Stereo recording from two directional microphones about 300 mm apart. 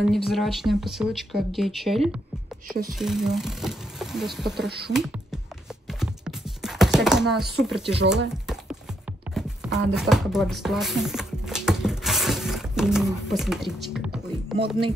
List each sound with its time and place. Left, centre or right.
0.0 s speech: centre
4.6 s speech: right
4.9 s music: centre
5.9 s chopping: centre
8.3 s a sound: centre